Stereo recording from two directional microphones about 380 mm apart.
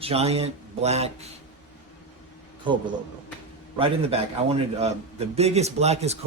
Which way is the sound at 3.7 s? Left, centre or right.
Centre.